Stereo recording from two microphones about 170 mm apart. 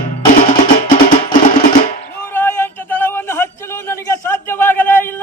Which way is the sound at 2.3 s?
10° left (ahead or behind).